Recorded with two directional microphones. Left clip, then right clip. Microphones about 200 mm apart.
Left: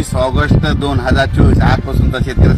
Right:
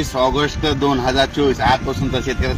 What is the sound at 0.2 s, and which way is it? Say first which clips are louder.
Speech: left 2 dB; 5° left (ahead or behind).